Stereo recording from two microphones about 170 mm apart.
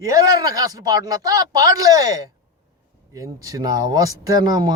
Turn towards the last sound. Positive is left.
turn(degrees=-25)  # may be behind; listen again after turning